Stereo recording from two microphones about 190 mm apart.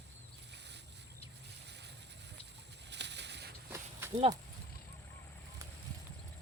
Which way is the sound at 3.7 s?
15° right (ahead or behind).